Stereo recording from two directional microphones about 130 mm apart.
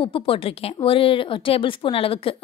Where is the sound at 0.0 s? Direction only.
45° left (ahead or behind).